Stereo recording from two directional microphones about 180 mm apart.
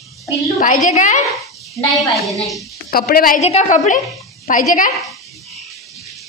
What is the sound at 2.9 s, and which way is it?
Speech, 55° left (ahead or behind).